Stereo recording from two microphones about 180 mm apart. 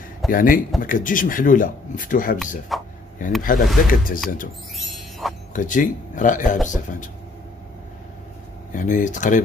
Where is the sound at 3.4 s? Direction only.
50° left (ahead or behind).